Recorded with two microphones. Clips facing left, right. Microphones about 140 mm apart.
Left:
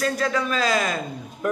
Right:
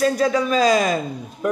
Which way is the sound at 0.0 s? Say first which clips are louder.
Right 5 dB; 15° right (ahead or behind).